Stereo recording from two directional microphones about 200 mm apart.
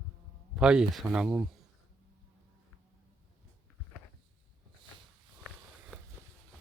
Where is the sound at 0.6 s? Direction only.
5° right (ahead or behind).